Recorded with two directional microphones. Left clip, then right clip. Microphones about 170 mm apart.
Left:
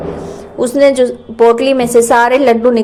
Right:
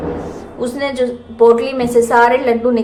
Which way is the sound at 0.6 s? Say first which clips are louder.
Left 9 dB; 35° left (ahead or behind).